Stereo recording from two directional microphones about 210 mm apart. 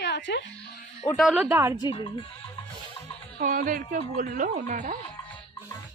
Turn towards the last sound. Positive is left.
turn(degrees=-35)  # may be behind; listen again after turning